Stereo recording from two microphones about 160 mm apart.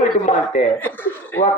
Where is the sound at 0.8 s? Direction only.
10° left (ahead or behind).